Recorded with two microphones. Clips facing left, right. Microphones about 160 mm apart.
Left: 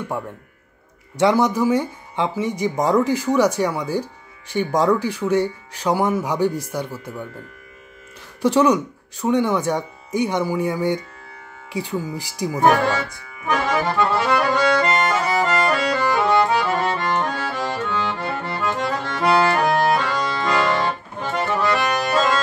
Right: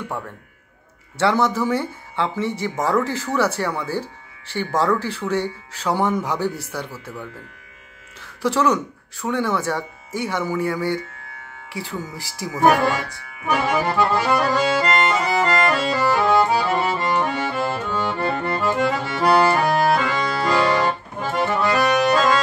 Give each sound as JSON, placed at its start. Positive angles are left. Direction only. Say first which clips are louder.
{"t": 1.1, "sound": "speech", "louder": "left 2 dB", "side_deg": 15}
{"t": 8.4, "sound": "speech", "louder": "left 3 dB", "side_deg": 15}
{"t": 13.5, "sound": "accordion", "louder": "even", "side_deg": -10}